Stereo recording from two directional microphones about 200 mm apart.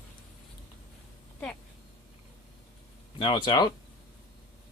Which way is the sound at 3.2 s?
25° left (ahead or behind).